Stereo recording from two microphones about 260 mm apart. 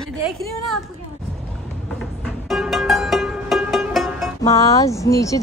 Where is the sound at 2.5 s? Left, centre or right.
Centre.